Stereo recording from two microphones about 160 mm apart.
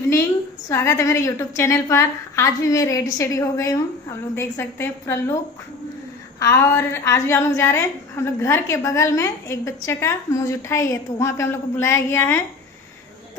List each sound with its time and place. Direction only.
0.7 s a woman's voice: 15° left (ahead or behind)
6.4 s a woman's voice: 15° left (ahead or behind)